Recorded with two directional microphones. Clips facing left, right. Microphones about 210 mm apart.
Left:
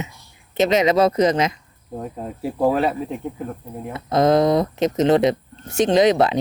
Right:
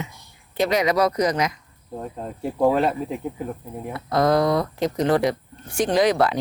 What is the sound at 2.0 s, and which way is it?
Speech, 5° left (ahead or behind).